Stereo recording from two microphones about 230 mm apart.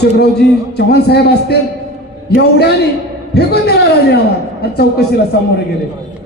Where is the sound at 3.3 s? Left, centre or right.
Left.